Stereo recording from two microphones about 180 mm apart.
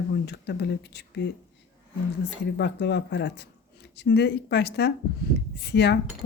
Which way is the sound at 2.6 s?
70° left (ahead or behind).